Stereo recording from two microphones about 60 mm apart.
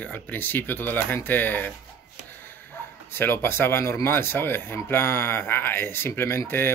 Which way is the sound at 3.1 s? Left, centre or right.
Left.